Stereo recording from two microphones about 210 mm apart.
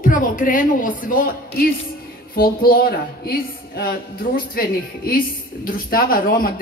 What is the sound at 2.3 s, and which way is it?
A woman's voice, 45° left (ahead or behind).